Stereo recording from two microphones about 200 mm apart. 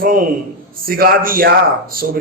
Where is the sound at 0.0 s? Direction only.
45° right (ahead or behind).